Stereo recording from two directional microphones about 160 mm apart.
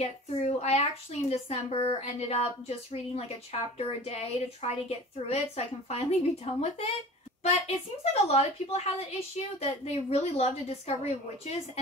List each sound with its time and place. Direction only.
0.0 s speech: 45° left (ahead or behind)